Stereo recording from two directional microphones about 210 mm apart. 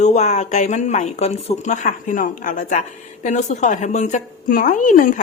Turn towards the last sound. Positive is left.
turn(degrees=40)  # may be behind; listen again after turning